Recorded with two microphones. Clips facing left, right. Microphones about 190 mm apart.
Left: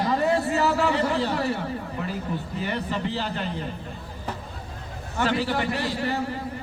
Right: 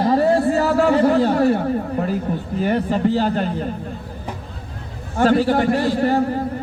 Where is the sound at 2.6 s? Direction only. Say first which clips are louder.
Right 11 dB; 45° right (ahead or behind).